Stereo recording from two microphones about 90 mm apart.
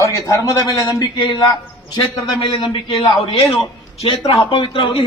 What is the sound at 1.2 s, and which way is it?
Speech, 55° left (ahead or behind).